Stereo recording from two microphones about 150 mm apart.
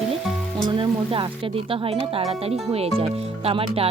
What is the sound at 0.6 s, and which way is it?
Speech, 35° right (ahead or behind).